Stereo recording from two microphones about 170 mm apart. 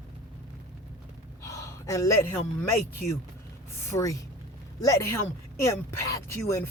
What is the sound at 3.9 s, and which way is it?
Speech, 20° left (ahead or behind).